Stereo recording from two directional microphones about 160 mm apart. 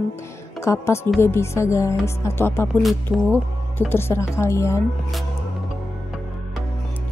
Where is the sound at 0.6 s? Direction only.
15° left (ahead or behind).